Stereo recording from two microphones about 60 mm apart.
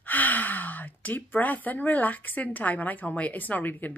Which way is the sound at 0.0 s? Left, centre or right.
Left.